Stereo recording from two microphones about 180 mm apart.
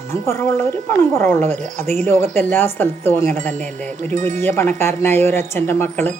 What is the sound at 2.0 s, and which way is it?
Speech, 15° left (ahead or behind).